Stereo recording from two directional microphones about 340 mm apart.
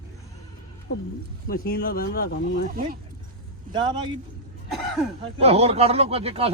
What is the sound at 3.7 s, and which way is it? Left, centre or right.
Speech, centre.